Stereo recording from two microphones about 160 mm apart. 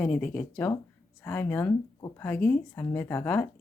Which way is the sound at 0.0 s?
5° left (ahead or behind).